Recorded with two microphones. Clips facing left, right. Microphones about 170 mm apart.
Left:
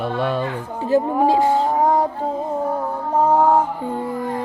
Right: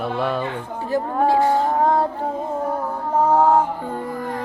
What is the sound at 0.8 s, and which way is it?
Speech, 20° left (ahead or behind).